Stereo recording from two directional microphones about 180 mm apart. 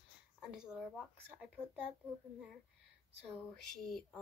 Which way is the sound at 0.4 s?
5° right (ahead or behind).